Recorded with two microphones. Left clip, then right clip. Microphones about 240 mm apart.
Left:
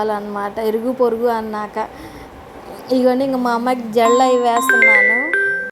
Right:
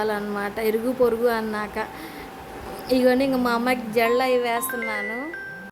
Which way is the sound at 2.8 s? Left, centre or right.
Centre.